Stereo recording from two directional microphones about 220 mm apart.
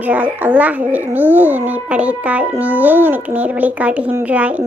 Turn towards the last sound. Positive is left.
turn(degrees=-5)  # may be behind; listen again after turning